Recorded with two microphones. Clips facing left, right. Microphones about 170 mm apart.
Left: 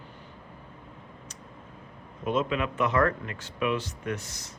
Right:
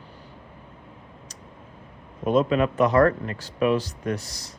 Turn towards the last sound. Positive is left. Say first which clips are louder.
# right 5 dB
turn(degrees=-35)  # may be behind; listen again after turning